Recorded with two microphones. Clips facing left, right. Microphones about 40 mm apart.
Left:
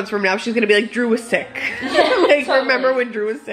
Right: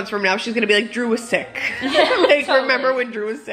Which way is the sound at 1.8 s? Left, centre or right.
Right.